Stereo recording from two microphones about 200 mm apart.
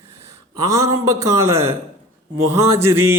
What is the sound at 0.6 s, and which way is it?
A man's voice, 15° right (ahead or behind).